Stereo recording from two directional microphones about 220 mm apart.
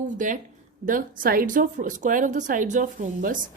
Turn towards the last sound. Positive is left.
turn(degrees=-35)  # may be behind; listen again after turning